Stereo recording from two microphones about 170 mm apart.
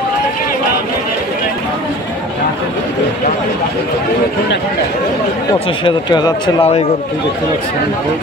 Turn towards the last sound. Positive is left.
turn(degrees=30)  # may be behind; listen again after turning